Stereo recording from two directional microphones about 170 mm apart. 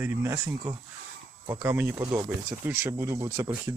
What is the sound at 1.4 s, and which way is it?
Speech, 15° right (ahead or behind).